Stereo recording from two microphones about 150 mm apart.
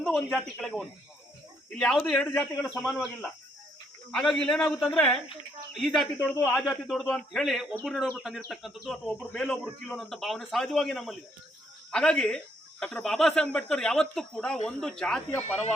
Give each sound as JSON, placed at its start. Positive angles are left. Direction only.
{"t": 0.0, "sound": "a man's voice", "side_deg": 0}
{"t": 4.1, "sound": "a man's voice", "side_deg": 5}